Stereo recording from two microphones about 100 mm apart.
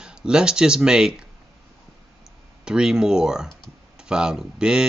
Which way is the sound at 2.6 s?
5° right (ahead or behind).